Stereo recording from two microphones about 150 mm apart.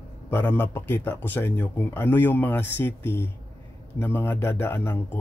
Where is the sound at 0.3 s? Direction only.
15° left (ahead or behind).